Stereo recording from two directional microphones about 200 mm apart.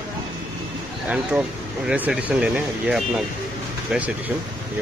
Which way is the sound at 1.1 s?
5° right (ahead or behind).